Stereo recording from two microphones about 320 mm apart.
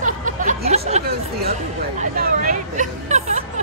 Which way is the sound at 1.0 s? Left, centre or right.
Right.